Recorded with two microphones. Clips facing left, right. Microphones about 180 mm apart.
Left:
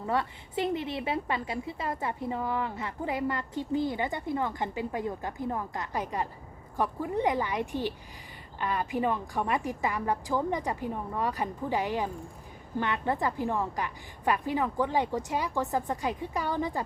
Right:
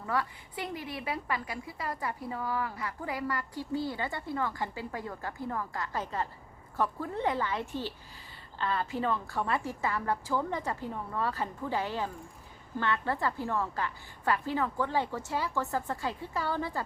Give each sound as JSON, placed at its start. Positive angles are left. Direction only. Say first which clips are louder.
{"t": 0.0, "sound": "a woman's voice", "louder": "left 3 dB", "side_deg": 25}